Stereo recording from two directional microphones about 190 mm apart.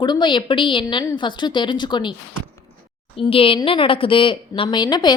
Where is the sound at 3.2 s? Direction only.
30° left (ahead or behind).